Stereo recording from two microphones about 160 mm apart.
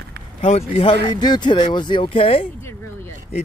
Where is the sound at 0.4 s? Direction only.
40° left (ahead or behind).